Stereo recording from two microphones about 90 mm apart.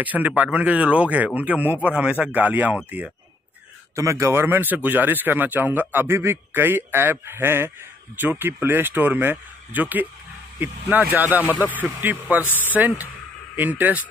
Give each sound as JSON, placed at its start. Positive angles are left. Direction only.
{"t": 0.0, "sound": "speech", "side_deg": -20}
{"t": 3.9, "sound": "speech", "side_deg": -35}